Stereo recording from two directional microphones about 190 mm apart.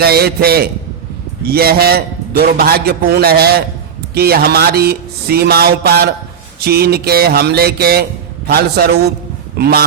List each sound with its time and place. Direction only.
0.0 s a man's voice: 55° right (ahead or behind)